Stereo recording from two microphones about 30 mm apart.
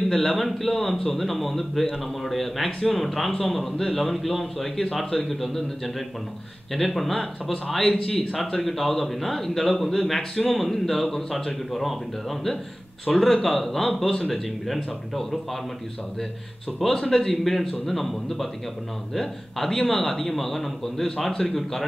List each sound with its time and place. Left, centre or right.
0.4 s a man's voice: centre
7.6 s a man's voice: centre
8.2 s a man's voice: centre
16.8 s a man's voice: centre